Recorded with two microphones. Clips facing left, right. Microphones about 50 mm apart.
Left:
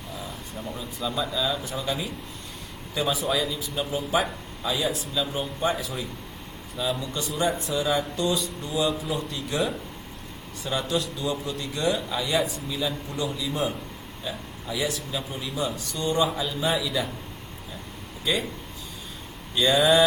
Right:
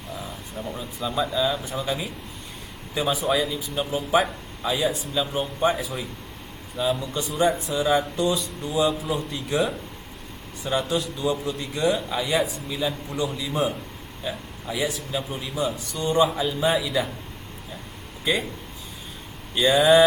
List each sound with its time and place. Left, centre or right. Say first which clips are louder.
0.2 s air conditioning: right 1 dB; centre
0.8 s a man's voice: right 3 dB; centre
5.7 s a man's voice: right 1 dB; centre
7.2 s a man's voice: right 4 dB; right
8.3 s speech: right 1 dB; centre
9.5 s a man's voice: right 3 dB; centre
18.3 s a man's voice: right 2 dB; centre
19.5 s a man's voice: right 3 dB; centre